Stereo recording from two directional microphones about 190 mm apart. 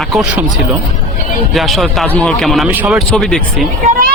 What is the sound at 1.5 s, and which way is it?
Speech, centre (ahead or behind).